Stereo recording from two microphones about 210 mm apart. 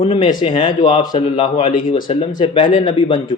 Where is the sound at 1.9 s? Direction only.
20° left (ahead or behind).